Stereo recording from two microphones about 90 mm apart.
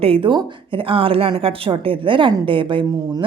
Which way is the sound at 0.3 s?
60° right (ahead or behind).